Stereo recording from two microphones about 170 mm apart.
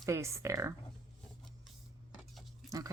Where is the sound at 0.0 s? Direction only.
15° right (ahead or behind).